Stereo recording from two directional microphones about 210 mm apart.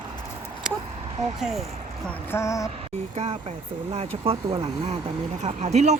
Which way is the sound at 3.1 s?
30° right (ahead or behind).